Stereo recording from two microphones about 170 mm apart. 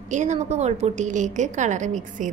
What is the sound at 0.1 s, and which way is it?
A woman's voice, 45° right (ahead or behind).